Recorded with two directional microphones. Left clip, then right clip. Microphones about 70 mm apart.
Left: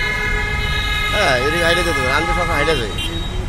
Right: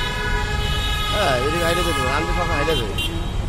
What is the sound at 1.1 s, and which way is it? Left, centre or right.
Speech, centre.